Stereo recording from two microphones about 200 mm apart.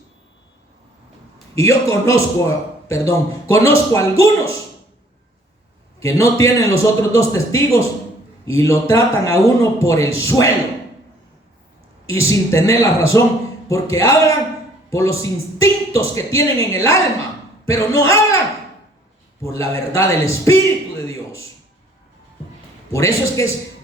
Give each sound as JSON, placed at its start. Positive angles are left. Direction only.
{"t": 1.5, "sound": "a man's voice", "side_deg": 15}
{"t": 6.0, "sound": "a man's voice", "side_deg": 15}
{"t": 12.0, "sound": "a man's voice", "side_deg": 15}
{"t": 19.4, "sound": "a man's voice", "side_deg": 15}
{"t": 22.9, "sound": "a man's voice", "side_deg": 15}